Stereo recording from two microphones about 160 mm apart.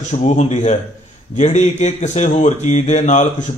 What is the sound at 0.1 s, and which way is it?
Speech, 45° left (ahead or behind).